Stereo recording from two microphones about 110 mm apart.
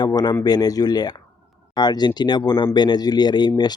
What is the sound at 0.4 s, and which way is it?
Speech, 35° left (ahead or behind).